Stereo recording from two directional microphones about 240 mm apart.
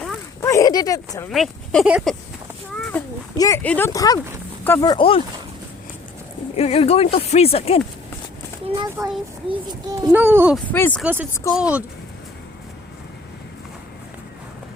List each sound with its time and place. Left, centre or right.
0.4 s speech: centre
1.3 s speech: centre
2.9 s speech: centre
6.6 s speech: left
8.7 s a child's voice: centre
10.7 s speech: centre
11.0 s a child's voice: centre